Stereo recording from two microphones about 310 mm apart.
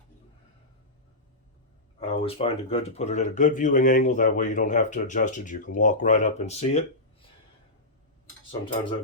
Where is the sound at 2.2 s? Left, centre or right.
Centre.